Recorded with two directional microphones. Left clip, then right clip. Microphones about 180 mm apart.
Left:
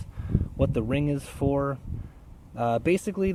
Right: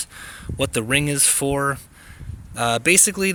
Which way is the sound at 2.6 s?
10° right (ahead or behind).